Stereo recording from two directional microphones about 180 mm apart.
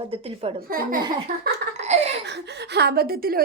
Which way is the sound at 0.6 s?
55° right (ahead or behind).